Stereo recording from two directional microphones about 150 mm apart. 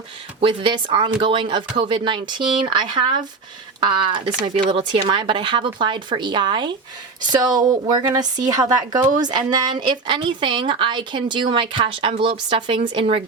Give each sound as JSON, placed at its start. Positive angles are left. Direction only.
{"t": 0.4, "sound": "a woman's voice", "side_deg": -35}